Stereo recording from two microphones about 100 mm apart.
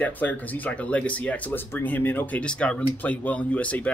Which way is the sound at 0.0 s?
15° left (ahead or behind).